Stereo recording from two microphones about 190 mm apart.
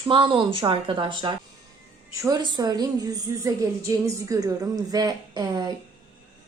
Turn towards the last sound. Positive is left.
turn(degrees=-20)  # may be behind; listen again after turning